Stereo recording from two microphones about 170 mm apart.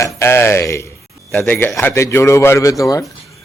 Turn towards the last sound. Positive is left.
turn(degrees=20)  # may be behind; listen again after turning